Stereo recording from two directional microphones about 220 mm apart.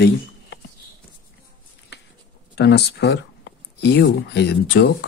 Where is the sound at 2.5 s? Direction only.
50° left (ahead or behind).